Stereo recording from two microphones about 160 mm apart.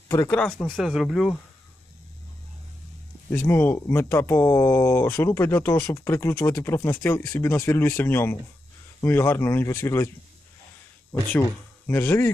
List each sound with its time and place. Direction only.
0.1 s speech: 10° left (ahead or behind)
3.3 s speech: 15° left (ahead or behind)
11.9 s speech: 15° left (ahead or behind)